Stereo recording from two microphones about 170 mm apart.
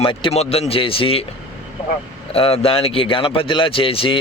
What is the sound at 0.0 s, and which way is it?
Speech, 30° left (ahead or behind).